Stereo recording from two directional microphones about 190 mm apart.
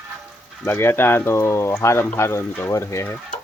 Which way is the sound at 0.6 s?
10° left (ahead or behind).